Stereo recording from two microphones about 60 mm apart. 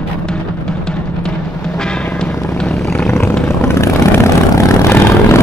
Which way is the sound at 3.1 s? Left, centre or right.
Left.